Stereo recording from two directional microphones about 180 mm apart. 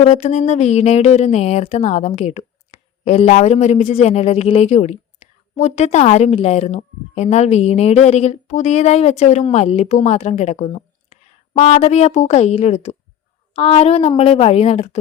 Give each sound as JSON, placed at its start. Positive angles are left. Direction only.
{"t": 0.0, "sound": "a woman's voice", "side_deg": 35}